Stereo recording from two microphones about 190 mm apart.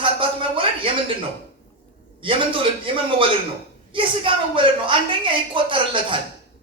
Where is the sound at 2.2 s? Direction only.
25° right (ahead or behind).